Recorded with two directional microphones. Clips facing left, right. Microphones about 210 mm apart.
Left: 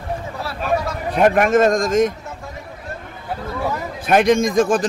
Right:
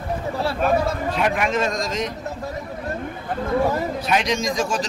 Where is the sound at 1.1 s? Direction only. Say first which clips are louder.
Left 11 dB; 50° left (ahead or behind).